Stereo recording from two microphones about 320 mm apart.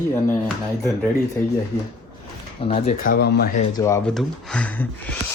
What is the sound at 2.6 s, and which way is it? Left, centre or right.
Speech, centre.